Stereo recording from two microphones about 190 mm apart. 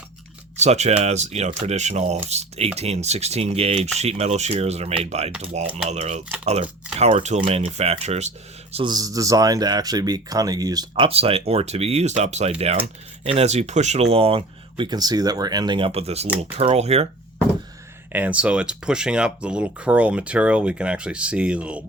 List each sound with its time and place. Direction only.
0.5 s speech: 35° right (ahead or behind)
8.7 s speech: 25° right (ahead or behind)
18.1 s speech: 5° right (ahead or behind)